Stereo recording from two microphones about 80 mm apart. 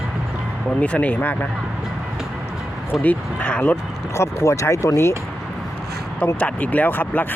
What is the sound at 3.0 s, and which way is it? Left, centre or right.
Speech, centre.